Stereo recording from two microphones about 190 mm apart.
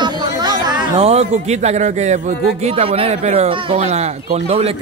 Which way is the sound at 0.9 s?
35° right (ahead or behind).